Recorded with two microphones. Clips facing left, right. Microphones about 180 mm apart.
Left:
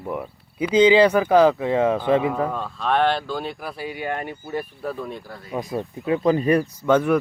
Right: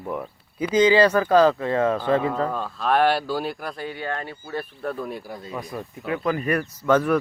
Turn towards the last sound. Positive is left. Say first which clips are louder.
# left 1 dB
turn(degrees=15)  # may be behind; listen again after turning